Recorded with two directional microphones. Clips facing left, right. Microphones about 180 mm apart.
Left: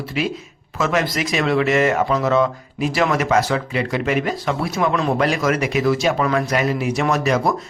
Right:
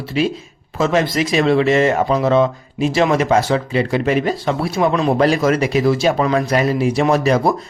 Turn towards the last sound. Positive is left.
turn(degrees=-30)  # may be behind; listen again after turning